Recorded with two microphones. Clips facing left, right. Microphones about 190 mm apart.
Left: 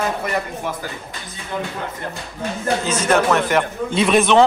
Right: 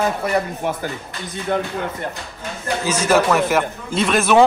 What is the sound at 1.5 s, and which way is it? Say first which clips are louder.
Speech: right 5 dB; 60° right (ahead or behind).